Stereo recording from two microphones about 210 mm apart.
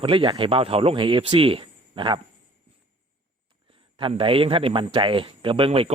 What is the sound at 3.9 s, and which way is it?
Speech, 25° right (ahead or behind).